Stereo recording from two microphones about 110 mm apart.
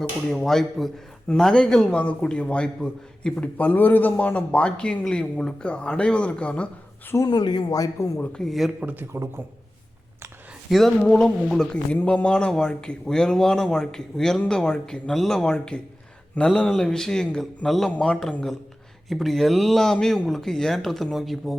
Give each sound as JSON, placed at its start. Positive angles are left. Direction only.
{"t": 0.0, "sound": "a man's voice", "side_deg": 5}
{"t": 7.3, "sound": "speech", "side_deg": 40}
{"t": 8.2, "sound": "speech", "side_deg": 5}
{"t": 8.9, "sound": "a man's voice", "side_deg": -20}
{"t": 10.7, "sound": "a man's voice", "side_deg": 0}